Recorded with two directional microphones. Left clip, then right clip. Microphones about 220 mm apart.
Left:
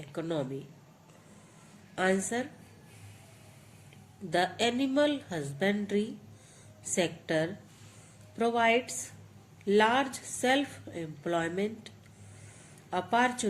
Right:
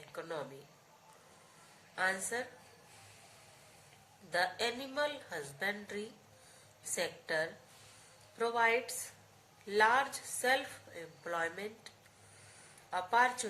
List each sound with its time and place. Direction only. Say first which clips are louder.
0.1 s speech: left 8 dB; 35° left (ahead or behind)
2.0 s speech: left 5 dB; 40° left (ahead or behind)
4.3 s speech: left 6 dB; 40° left (ahead or behind)
12.9 s speech: left 3 dB; 40° left (ahead or behind)